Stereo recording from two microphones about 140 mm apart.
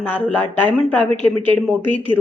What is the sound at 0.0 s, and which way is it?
A woman's voice, 10° left (ahead or behind).